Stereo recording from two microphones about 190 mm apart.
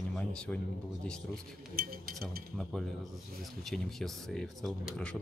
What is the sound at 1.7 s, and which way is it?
Speech, 50° right (ahead or behind).